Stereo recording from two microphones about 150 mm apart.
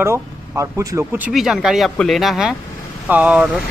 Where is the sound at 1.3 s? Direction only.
Centre (ahead or behind).